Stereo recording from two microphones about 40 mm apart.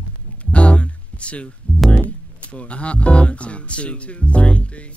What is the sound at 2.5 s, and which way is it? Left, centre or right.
Speech, left.